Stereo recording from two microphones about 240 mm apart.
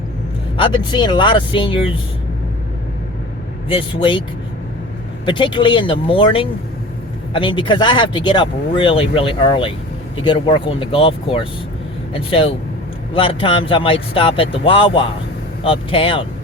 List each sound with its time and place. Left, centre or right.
0.5 s speech: centre
3.7 s speech: left
5.2 s speech: centre